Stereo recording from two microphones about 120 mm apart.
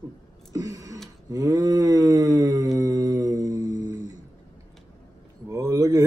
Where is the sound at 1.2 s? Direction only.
30° right (ahead or behind).